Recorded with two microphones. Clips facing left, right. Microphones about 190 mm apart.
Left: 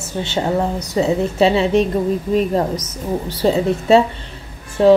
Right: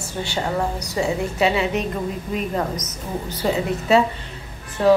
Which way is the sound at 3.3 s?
30° left (ahead or behind).